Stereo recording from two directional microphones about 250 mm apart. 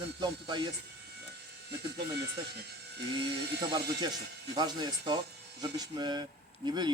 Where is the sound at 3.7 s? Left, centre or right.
Centre.